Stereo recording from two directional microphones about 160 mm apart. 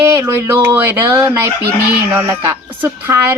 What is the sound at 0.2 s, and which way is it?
Speech, 15° right (ahead or behind).